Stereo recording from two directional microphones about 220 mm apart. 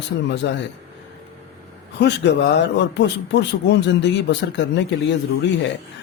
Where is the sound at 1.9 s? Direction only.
50° left (ahead or behind).